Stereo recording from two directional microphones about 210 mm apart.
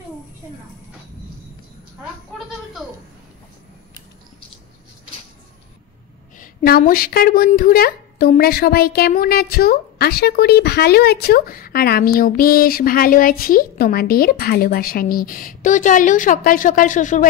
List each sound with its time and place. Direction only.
6.3 s a woman's voice: 45° left (ahead or behind)